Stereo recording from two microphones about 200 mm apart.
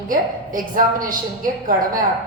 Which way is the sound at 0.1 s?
45° right (ahead or behind).